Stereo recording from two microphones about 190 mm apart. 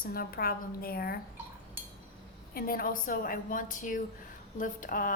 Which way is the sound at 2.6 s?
50° left (ahead or behind).